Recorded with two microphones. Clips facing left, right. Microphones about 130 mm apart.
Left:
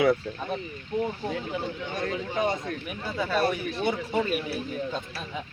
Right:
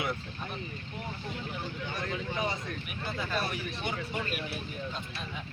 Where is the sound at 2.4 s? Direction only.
50° left (ahead or behind).